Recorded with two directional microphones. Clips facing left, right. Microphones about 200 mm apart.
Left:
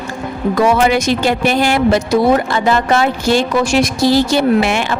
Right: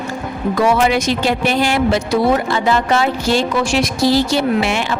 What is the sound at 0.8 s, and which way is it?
Speech, 50° left (ahead or behind).